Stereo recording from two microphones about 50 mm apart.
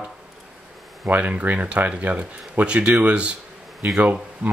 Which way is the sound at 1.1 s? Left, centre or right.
Right.